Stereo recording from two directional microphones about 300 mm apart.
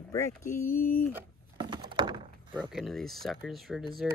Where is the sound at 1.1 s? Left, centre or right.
Centre.